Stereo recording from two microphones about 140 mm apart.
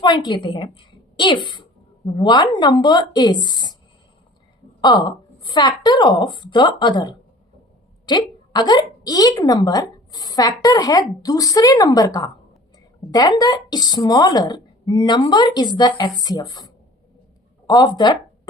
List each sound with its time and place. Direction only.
0.0 s a woman's voice: 30° left (ahead or behind)
4.8 s a woman's voice: 30° left (ahead or behind)